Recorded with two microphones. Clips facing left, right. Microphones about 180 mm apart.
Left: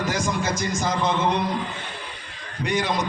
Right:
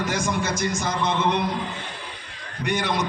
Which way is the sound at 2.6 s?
60° right (ahead or behind).